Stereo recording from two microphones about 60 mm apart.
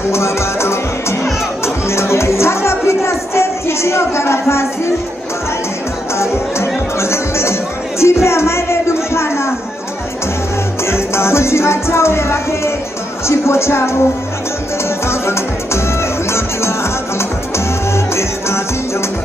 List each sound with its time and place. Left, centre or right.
0.1 s music: left
1.6 s speech: left
6.1 s music: left
10.8 s music: left
15.0 s music: left